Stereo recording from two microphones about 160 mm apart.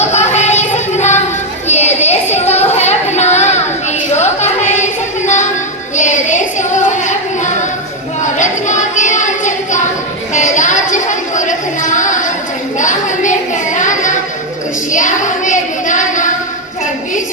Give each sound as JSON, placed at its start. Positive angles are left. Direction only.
{"t": 0.1, "sound": "music", "side_deg": 45}
{"t": 1.6, "sound": "a sound", "side_deg": 45}
{"t": 6.0, "sound": "female singing", "side_deg": 50}
{"t": 8.2, "sound": "child singing", "side_deg": 50}
{"t": 10.3, "sound": "a sound", "side_deg": 50}
{"t": 13.7, "sound": "child singing", "side_deg": 50}